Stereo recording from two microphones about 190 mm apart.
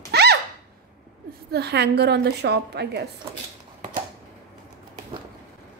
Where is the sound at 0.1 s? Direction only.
60° right (ahead or behind).